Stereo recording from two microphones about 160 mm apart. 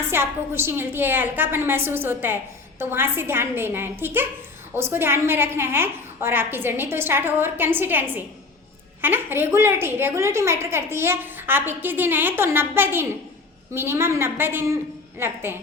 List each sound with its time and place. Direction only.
0.0 s a woman's voice: 15° right (ahead or behind)